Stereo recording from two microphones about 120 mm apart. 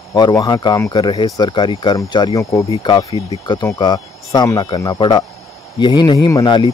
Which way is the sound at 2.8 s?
40° left (ahead or behind).